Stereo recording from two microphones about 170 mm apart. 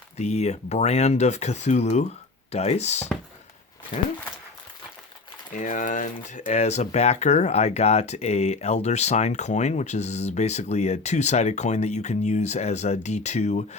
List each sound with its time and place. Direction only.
0.2 s speech: 40° left (ahead or behind)
5.5 s speech: 50° left (ahead or behind)